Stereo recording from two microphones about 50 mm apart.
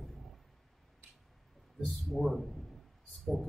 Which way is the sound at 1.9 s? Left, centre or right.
Centre.